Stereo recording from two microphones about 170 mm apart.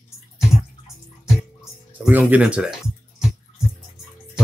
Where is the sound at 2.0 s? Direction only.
10° right (ahead or behind).